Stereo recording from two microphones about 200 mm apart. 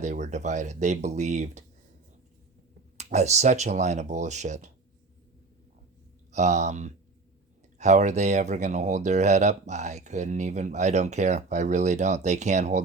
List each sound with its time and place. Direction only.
0.0 s speech: 35° right (ahead or behind)
3.0 s speech: 35° right (ahead or behind)
6.3 s speech: 35° right (ahead or behind)